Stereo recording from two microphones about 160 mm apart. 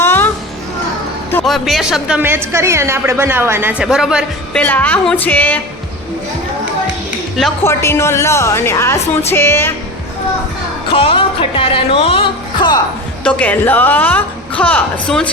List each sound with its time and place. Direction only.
0.0 s music: 15° left (ahead or behind)
1.5 s speech: centre (ahead or behind)
4.6 s a woman's voice: 10° left (ahead or behind)
7.6 s a woman's voice: 15° left (ahead or behind)
10.9 s music: 35° left (ahead or behind)
13.2 s a woman's voice: 10° left (ahead or behind)